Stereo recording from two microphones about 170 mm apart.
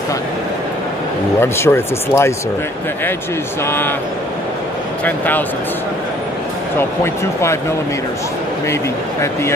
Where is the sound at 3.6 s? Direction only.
10° left (ahead or behind).